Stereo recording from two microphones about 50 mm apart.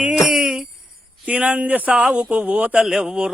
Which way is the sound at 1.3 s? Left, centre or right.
Right.